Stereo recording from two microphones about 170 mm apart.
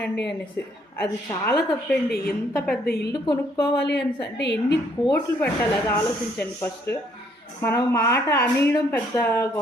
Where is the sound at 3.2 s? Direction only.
25° left (ahead or behind).